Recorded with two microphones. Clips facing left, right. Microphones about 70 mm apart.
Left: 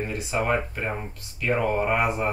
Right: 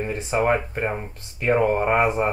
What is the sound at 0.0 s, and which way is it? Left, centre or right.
Speech, right.